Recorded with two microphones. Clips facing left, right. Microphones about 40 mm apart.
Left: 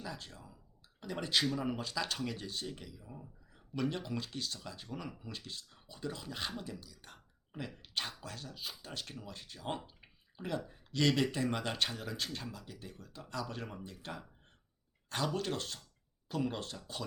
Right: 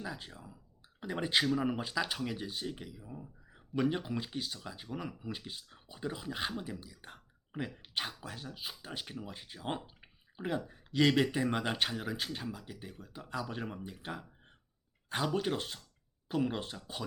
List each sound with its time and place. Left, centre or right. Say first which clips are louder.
0.0 s speech: right 3 dB; centre